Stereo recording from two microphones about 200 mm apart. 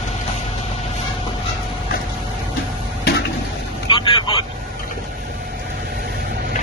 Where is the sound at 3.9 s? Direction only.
25° left (ahead or behind).